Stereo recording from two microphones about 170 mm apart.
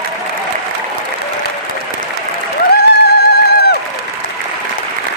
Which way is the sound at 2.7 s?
70° left (ahead or behind).